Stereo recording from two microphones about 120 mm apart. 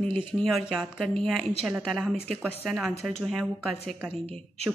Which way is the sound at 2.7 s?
5° right (ahead or behind).